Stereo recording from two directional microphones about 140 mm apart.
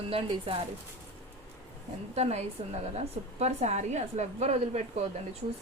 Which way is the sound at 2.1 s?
50° right (ahead or behind).